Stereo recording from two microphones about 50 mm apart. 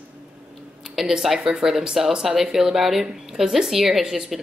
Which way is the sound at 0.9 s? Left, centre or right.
Centre.